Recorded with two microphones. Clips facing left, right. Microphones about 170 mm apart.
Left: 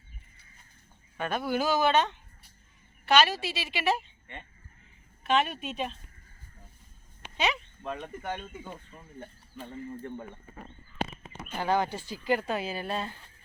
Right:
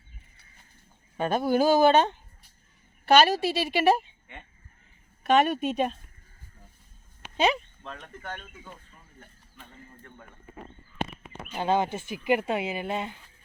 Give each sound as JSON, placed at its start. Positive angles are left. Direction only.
{"t": 1.3, "sound": "a woman's voice", "side_deg": -40}
{"t": 5.2, "sound": "a woman's voice", "side_deg": -45}
{"t": 7.9, "sound": "speech", "side_deg": 10}
{"t": 9.6, "sound": "speech", "side_deg": 35}
{"t": 11.5, "sound": "speech", "side_deg": -20}